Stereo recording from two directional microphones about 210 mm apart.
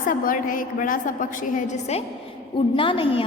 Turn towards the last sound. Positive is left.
turn(degrees=25)  # may be behind; listen again after turning